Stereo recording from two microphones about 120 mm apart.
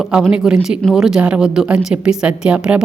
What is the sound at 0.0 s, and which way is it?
A woman's voice, 5° right (ahead or behind).